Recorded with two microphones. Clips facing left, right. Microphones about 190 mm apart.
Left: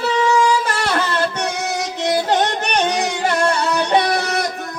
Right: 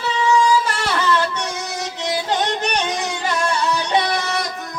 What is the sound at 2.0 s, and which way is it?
Music, 55° left (ahead or behind).